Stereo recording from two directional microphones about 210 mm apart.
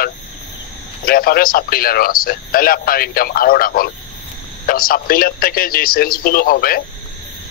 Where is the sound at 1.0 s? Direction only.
45° left (ahead or behind).